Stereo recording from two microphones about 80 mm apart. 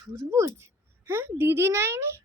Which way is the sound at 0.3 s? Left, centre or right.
Right.